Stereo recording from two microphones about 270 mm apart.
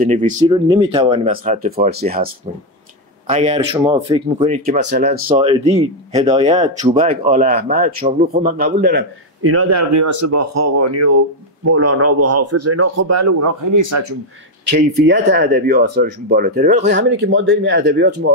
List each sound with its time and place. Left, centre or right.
0.0 s speech: right
0.5 s speech: centre; by 2.3 s right
3.3 s speech: right
4.8 s speech: right
5.3 s speech: right
9.4 s speech: right
14.7 s speech: right